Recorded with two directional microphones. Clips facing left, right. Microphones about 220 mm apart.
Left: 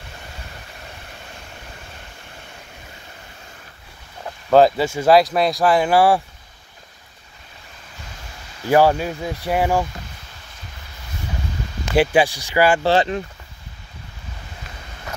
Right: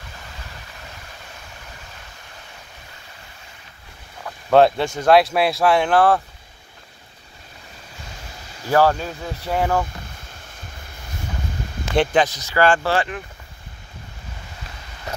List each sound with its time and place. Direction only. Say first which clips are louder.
4.5 s speech: left 1 dB; centre (ahead or behind)
8.6 s speech: left 2 dB; 15° left (ahead or behind)
11.9 s speech: left 2 dB; 10° left (ahead or behind)
12.8 s speech: left 4 dB; 25° left (ahead or behind)